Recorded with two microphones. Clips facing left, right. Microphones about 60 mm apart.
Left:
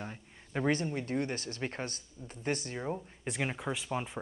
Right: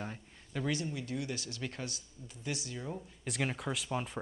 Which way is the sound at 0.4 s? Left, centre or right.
Left.